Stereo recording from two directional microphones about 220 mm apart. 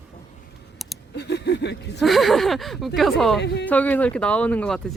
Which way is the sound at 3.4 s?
50° left (ahead or behind).